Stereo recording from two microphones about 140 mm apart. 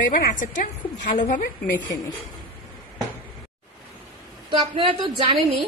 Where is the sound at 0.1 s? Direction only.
65° left (ahead or behind).